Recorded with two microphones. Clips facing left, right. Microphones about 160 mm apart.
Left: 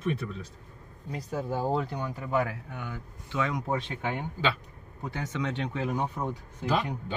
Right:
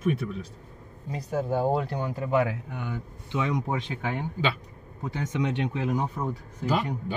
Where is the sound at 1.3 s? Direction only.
20° right (ahead or behind).